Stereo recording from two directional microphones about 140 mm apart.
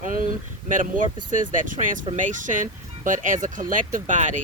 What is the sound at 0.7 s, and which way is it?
Speech, 65° right (ahead or behind).